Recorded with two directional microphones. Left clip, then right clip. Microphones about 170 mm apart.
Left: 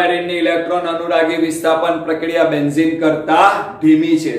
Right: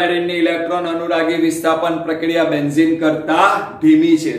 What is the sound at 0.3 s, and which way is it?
A man's voice, 5° left (ahead or behind).